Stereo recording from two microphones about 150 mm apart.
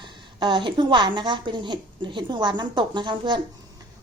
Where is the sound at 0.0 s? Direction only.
30° right (ahead or behind).